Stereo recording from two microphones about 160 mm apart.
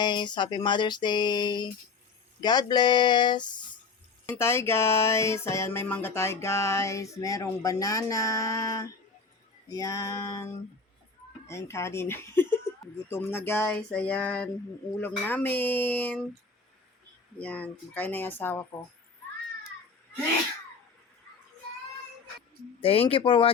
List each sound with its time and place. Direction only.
0.0 s a sound: 30° left (ahead or behind)
4.3 s music: 15° left (ahead or behind)
9.6 s a sound: 20° left (ahead or behind)
11.4 s music: 15° left (ahead or behind)
17.3 s music: 10° left (ahead or behind)
22.8 s speech: 35° left (ahead or behind)